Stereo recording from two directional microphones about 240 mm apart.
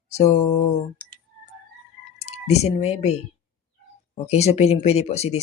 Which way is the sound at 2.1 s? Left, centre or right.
Left.